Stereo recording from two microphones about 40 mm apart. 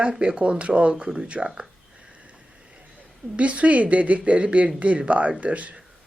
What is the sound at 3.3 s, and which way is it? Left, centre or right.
A woman's voice, right.